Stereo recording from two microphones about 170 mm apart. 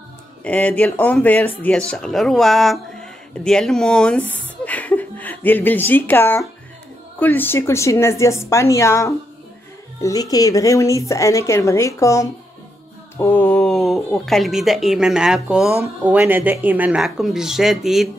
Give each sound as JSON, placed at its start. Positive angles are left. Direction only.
{"t": 0.4, "sound": "a woman's voice", "side_deg": 10}